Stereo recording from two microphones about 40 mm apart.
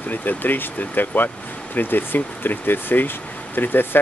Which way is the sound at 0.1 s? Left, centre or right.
Left.